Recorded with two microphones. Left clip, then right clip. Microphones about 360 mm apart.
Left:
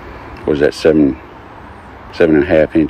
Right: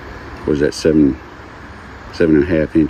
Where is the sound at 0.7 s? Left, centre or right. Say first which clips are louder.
Left 4 dB; centre.